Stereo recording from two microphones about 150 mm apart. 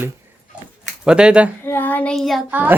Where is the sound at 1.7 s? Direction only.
10° left (ahead or behind).